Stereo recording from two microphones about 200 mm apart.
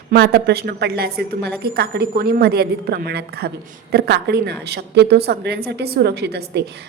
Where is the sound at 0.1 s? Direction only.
55° right (ahead or behind).